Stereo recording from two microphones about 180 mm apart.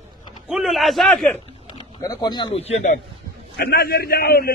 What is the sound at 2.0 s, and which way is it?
Speech, 25° left (ahead or behind).